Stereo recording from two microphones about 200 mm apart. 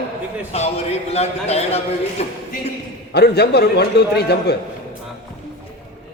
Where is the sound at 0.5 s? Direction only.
30° left (ahead or behind).